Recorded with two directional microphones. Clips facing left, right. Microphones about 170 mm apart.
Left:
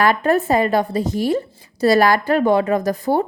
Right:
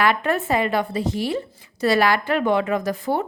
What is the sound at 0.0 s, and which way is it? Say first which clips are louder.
A woman's voice: left 4 dB; 40° left (ahead or behind).